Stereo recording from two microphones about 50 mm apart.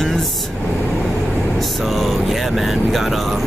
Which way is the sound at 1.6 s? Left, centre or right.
Centre.